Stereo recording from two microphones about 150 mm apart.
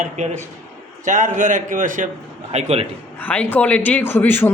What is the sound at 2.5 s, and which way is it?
Speech, 45° right (ahead or behind).